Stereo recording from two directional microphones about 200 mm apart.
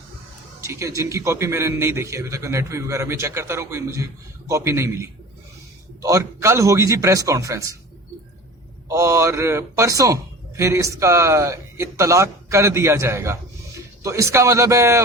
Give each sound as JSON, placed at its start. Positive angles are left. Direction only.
{"t": 0.6, "sound": "a man's voice", "side_deg": -15}
{"t": 8.9, "sound": "a man's voice", "side_deg": -15}